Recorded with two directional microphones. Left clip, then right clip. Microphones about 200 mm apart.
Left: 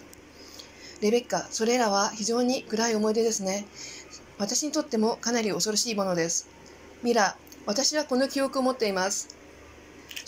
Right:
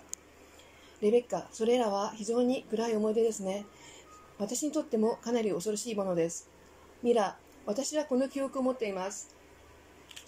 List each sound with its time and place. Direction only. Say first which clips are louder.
1.0 s speech: left 2 dB; 15° right (ahead or behind)